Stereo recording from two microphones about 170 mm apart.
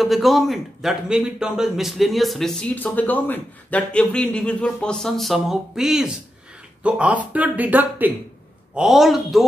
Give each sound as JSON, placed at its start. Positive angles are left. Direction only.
{"t": 0.0, "sound": "a man's voice", "side_deg": 0}